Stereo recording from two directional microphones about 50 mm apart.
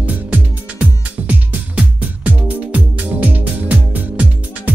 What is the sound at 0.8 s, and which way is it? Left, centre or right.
Music, right.